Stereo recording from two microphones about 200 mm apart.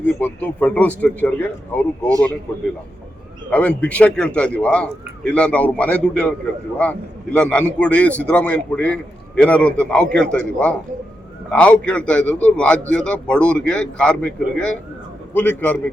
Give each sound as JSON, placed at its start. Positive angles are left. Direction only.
{"t": 0.0, "sound": "a man's voice", "side_deg": 10}
{"t": 3.5, "sound": "a man's voice", "side_deg": 5}